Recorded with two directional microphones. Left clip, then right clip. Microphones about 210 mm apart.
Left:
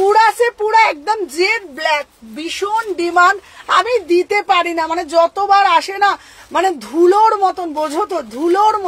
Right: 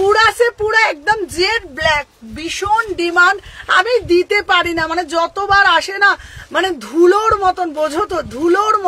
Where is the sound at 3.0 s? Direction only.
20° right (ahead or behind).